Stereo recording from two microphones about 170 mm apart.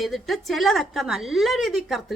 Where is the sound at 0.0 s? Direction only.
Centre (ahead or behind).